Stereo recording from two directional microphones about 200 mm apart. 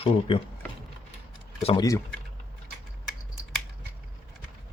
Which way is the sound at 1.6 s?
30° left (ahead or behind).